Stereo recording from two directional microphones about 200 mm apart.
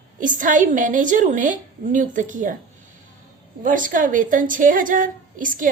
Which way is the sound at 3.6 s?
40° right (ahead or behind).